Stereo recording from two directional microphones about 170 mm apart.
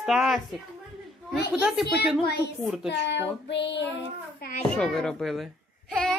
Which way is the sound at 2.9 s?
90° left.